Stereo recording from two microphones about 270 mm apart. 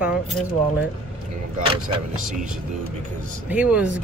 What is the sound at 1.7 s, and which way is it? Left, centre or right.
Speech, right.